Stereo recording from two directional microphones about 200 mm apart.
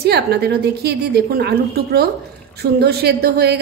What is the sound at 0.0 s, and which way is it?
A woman's voice, 55° right (ahead or behind).